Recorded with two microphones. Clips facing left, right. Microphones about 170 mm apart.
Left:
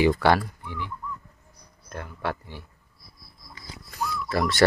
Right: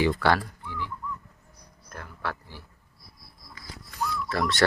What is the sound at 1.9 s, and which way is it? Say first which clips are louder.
Speech: left 4 dB; 20° left (ahead or behind).